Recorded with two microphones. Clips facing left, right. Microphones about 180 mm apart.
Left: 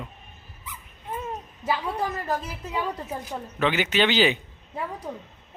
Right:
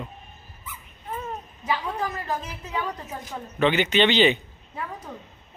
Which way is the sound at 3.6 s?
5° left (ahead or behind).